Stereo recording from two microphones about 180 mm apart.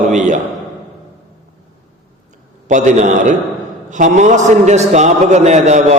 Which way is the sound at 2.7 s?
45° right (ahead or behind).